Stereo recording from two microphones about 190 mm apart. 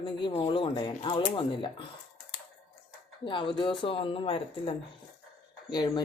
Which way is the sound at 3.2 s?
25° left (ahead or behind).